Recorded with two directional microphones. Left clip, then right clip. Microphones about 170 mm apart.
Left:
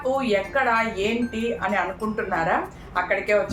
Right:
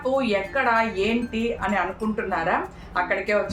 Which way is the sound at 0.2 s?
5° right (ahead or behind).